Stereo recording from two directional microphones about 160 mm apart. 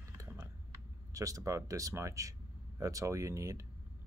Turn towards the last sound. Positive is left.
turn(degrees=-20)  # may be behind; listen again after turning